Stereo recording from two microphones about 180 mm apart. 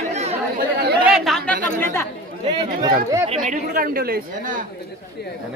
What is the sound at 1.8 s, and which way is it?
Speech, 15° left (ahead or behind).